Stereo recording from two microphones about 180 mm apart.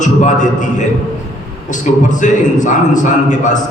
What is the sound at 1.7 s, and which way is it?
A man's voice, 45° left (ahead or behind).